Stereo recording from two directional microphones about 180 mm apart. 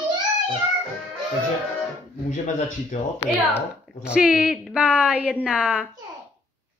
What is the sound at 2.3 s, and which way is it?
Speech, 45° left (ahead or behind).